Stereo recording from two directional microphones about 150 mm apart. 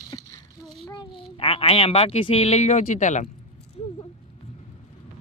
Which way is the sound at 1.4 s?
40° left (ahead or behind).